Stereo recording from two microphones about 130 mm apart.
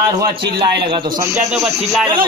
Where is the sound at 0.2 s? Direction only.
40° right (ahead or behind).